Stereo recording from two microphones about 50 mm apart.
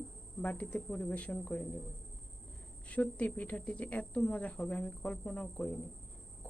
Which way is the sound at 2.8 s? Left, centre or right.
Left.